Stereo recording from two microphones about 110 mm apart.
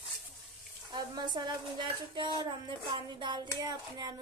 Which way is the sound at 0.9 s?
40° right (ahead or behind).